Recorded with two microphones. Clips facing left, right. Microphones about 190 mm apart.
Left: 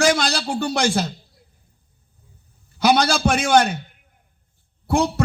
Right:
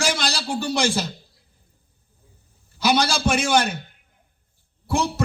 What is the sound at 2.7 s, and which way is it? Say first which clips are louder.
A man's voice: left 3 dB; 60° left (ahead or behind).